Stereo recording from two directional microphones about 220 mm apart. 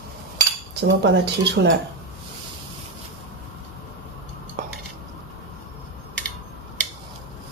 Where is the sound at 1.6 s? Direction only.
50° right (ahead or behind).